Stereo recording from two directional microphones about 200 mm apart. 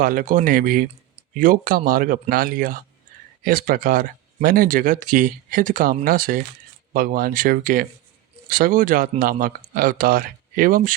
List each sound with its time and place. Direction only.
0.0 s speech: 45° right (ahead or behind)